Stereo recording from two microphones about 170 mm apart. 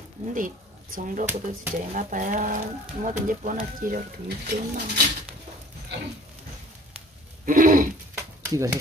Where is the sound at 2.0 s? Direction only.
50° right (ahead or behind).